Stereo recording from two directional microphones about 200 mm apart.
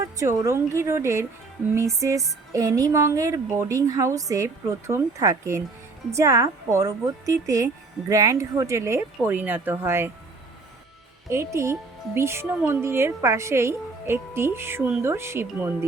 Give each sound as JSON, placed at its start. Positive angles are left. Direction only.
{"t": 0.0, "sound": "speech", "side_deg": -15}
{"t": 11.3, "sound": "speech", "side_deg": -15}